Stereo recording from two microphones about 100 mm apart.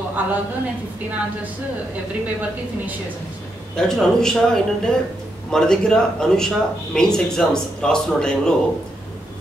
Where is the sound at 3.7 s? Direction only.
5° left (ahead or behind).